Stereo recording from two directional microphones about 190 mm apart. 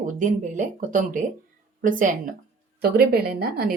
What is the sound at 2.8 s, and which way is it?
Speech, 55° right (ahead or behind).